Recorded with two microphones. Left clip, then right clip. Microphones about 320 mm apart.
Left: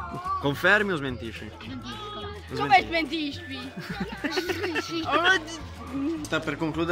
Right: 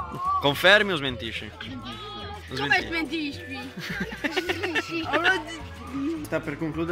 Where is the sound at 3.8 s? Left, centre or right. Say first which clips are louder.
Right 4 dB; centre.